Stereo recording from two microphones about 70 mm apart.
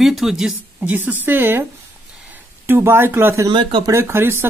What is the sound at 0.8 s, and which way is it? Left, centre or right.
Speech, right.